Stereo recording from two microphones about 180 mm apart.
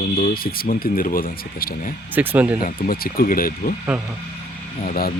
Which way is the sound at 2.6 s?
55° left (ahead or behind).